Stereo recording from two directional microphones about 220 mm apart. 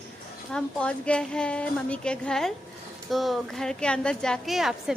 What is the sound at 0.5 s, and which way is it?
A woman's voice, 5° left (ahead or behind).